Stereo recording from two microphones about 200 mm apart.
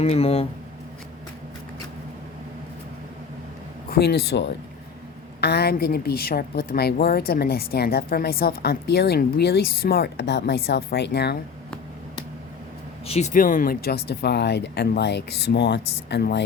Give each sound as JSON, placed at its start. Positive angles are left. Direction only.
{"t": 0.0, "sound": "speech", "side_deg": 30}
{"t": 3.8, "sound": "a woman's voice", "side_deg": 50}
{"t": 13.1, "sound": "speech", "side_deg": 35}